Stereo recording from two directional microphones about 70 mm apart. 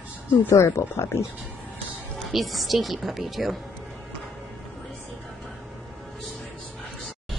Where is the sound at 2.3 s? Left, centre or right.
Centre.